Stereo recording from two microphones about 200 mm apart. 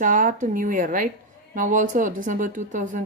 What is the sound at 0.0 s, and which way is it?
A woman's voice, 40° right (ahead or behind).